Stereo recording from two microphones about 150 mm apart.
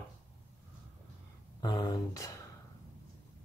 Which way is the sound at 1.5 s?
30° left (ahead or behind).